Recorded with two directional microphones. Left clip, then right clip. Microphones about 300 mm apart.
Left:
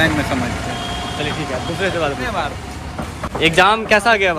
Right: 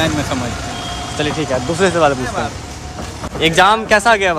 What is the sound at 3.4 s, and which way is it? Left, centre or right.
Speech, centre.